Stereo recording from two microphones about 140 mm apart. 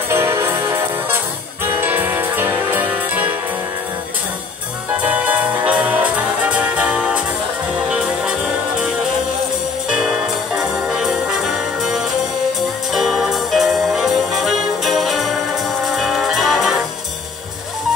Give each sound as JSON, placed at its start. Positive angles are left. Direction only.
{"t": 0.1, "sound": "music", "side_deg": -20}
{"t": 1.8, "sound": "music", "side_deg": -15}
{"t": 5.0, "sound": "music", "side_deg": -10}
{"t": 9.8, "sound": "music", "side_deg": -5}